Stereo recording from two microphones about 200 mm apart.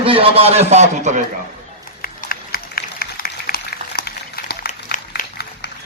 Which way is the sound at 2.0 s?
50° left (ahead or behind).